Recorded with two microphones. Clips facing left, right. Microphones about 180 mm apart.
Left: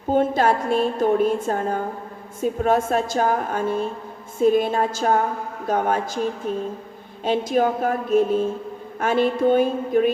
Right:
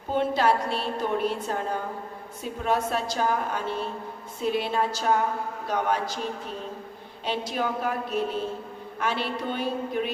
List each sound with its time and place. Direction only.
0.1 s a woman's voice: 45° left (ahead or behind)
7.3 s a woman's voice: 45° left (ahead or behind)